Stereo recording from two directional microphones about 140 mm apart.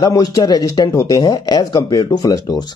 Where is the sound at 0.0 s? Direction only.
25° left (ahead or behind).